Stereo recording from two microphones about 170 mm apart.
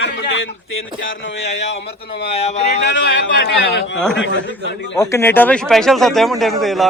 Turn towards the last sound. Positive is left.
turn(degrees=0)  # may be behind; listen again after turning